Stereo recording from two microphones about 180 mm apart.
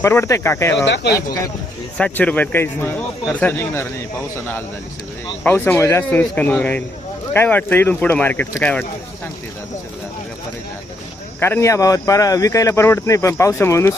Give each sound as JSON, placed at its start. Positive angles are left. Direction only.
{"t": 0.0, "sound": "speech", "side_deg": 15}
{"t": 0.9, "sound": "speech", "side_deg": 70}
{"t": 2.0, "sound": "speech", "side_deg": 5}
{"t": 5.4, "sound": "speech", "side_deg": 10}
{"t": 11.3, "sound": "speech", "side_deg": 10}